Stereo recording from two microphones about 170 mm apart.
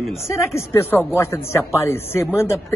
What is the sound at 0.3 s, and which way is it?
Speech, 15° left (ahead or behind).